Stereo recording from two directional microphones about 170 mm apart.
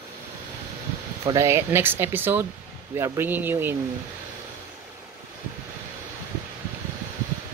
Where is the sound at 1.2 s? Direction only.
15° right (ahead or behind).